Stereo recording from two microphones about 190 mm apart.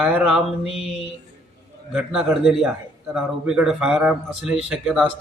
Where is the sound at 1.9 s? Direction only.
5° right (ahead or behind).